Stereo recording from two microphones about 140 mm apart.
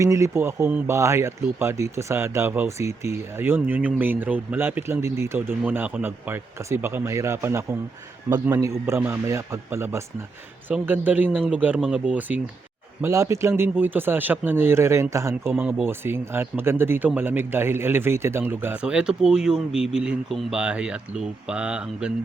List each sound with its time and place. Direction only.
0.0 s a man's voice: 20° right (ahead or behind)
13.0 s a man's voice: 20° right (ahead or behind)